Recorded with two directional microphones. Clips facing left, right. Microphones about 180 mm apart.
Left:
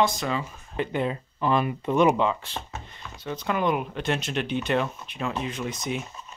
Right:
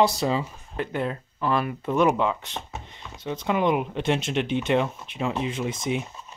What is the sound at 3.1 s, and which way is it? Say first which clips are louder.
Speech: right 2 dB; 20° right (ahead or behind).